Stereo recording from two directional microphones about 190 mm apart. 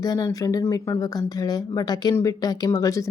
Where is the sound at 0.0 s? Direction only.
20° left (ahead or behind).